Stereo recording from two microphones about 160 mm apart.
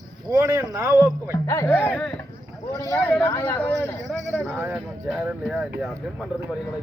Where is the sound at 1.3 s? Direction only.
20° left (ahead or behind).